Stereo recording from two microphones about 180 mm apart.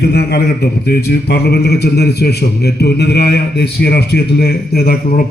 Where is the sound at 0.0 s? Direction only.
60° left (ahead or behind).